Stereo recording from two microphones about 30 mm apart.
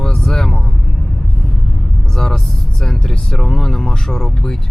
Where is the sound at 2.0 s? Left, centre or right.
Left.